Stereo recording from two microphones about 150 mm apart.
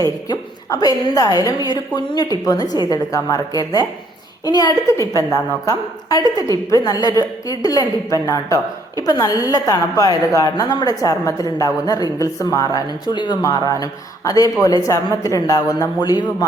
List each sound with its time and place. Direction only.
0.0 s a woman's voice: 25° left (ahead or behind)